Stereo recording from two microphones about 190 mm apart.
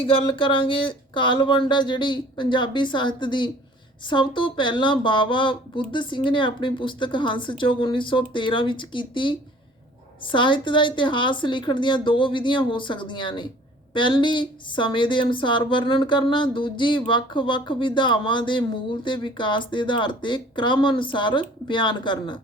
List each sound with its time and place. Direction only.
0.0 s speech: 30° left (ahead or behind)